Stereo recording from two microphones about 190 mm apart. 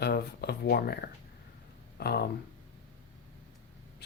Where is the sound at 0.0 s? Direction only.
60° left (ahead or behind).